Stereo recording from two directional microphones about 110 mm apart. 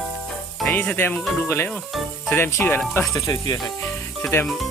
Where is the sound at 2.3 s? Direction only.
20° left (ahead or behind).